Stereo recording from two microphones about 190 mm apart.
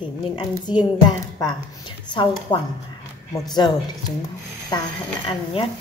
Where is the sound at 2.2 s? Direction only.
25° left (ahead or behind).